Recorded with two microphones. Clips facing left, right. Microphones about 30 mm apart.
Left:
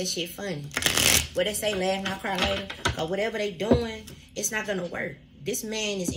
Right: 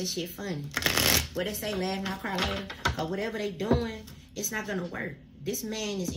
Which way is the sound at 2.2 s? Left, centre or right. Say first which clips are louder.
Left 2 dB; left.